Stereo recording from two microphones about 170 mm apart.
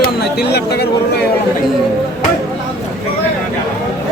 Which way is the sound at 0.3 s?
70° left (ahead or behind).